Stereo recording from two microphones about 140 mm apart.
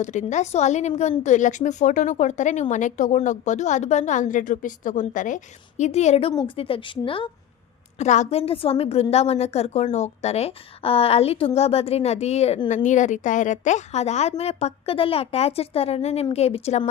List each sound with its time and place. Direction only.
0.0 s a woman's voice: 60° left (ahead or behind)
6.3 s a woman's voice: 40° left (ahead or behind)
7.9 s a woman's voice: 55° left (ahead or behind)
12.6 s a woman's voice: 60° left (ahead or behind)